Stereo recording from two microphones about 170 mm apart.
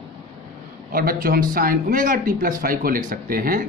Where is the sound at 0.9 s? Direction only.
60° right (ahead or behind).